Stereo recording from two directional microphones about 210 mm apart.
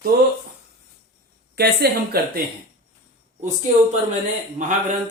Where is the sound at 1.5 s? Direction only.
50° right (ahead or behind).